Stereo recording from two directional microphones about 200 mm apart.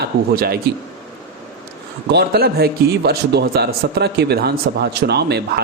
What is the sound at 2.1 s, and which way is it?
A man's voice, 55° right (ahead or behind).